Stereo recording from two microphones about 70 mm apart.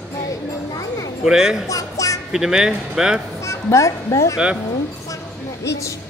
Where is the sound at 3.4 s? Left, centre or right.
Left.